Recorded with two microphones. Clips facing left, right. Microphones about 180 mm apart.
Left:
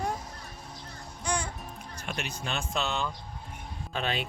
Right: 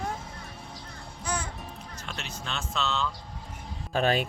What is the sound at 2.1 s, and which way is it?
Speech, 15° left (ahead or behind).